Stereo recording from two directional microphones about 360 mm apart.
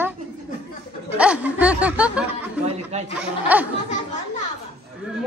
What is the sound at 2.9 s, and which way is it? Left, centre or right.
Speech, centre.